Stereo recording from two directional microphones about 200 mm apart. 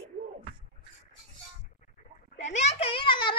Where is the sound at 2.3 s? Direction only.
35° left (ahead or behind).